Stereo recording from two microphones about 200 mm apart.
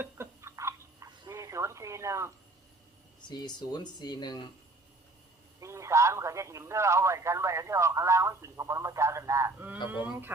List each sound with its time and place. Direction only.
0.0 s a sound: 15° right (ahead or behind)
3.2 s speech: 20° left (ahead or behind)
5.5 s a man's voice: 15° right (ahead or behind)